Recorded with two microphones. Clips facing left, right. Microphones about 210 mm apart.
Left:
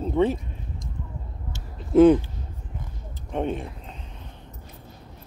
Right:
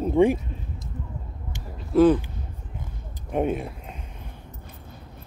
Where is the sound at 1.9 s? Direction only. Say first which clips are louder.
Left 3 dB; 20° left (ahead or behind).